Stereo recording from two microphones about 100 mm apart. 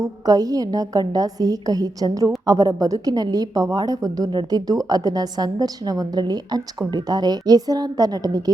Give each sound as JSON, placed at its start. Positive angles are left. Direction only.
{"t": 0.0, "sound": "a woman's voice", "side_deg": -40}